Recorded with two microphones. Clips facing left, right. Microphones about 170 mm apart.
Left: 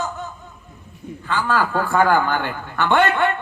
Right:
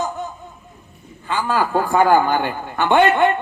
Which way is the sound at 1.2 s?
15° right (ahead or behind).